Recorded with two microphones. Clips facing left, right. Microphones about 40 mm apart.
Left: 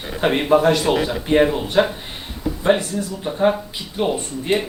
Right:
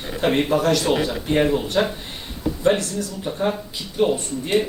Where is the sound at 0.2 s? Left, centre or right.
Centre.